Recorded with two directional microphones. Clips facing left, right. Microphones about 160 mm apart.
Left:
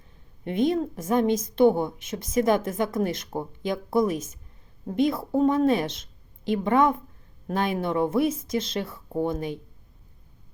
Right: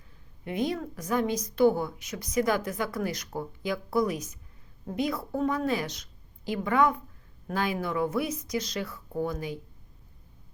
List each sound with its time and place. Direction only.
0.6 s a woman's voice: 25° left (ahead or behind)